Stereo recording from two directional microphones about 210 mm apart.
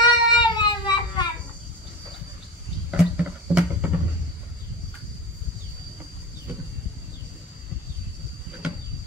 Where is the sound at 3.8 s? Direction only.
10° right (ahead or behind).